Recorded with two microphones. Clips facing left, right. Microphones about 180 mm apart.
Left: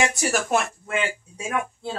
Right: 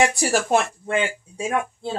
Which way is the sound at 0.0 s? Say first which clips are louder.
Right 3 dB; 30° right (ahead or behind).